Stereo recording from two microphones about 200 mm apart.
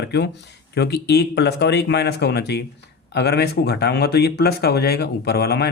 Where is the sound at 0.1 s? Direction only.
60° left (ahead or behind).